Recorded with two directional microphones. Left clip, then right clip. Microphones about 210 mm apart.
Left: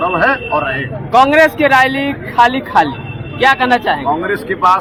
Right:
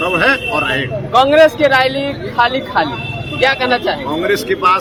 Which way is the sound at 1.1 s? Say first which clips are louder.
Even; 45° left (ahead or behind).